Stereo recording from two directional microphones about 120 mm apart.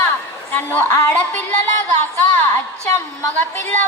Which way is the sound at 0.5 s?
15° left (ahead or behind).